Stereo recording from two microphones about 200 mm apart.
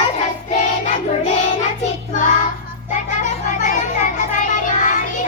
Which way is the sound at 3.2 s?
40° left (ahead or behind).